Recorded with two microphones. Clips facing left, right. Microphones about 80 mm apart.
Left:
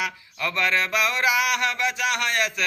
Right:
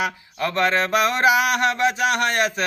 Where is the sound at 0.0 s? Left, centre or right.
Right.